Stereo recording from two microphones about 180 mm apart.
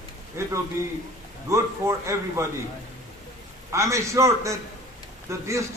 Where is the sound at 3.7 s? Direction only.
15° right (ahead or behind).